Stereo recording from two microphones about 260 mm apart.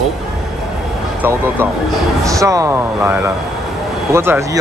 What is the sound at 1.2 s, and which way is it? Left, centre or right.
Speech, centre.